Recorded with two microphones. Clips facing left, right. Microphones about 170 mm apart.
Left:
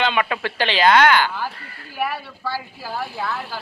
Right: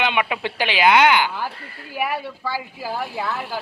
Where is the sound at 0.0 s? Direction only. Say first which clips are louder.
Left 1 dB; 15° right (ahead or behind).